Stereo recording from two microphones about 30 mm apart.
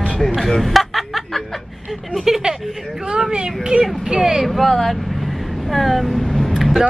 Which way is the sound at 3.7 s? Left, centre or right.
Right.